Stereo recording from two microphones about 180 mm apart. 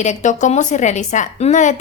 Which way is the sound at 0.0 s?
40° left (ahead or behind).